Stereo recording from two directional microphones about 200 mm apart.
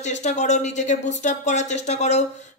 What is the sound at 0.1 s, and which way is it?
Speech, 35° left (ahead or behind).